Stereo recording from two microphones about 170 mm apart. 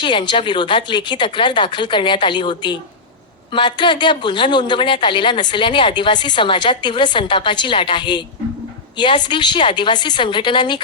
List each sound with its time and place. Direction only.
0.0 s a woman's voice: 30° left (ahead or behind)